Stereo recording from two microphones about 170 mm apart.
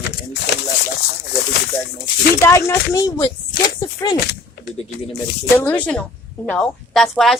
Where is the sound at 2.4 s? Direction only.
15° left (ahead or behind).